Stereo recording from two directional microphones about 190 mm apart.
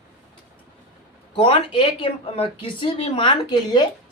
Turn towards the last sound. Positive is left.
turn(degrees=25)  # may be behind; listen again after turning